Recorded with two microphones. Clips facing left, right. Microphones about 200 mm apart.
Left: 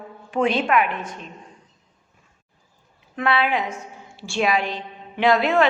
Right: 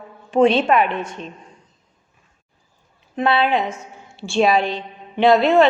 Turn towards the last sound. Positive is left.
turn(degrees=-25)  # may be behind; listen again after turning